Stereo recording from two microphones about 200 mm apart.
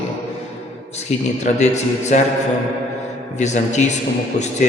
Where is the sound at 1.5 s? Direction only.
35° left (ahead or behind).